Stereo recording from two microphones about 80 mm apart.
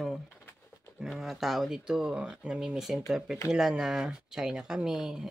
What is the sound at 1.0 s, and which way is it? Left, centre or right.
Speech, centre.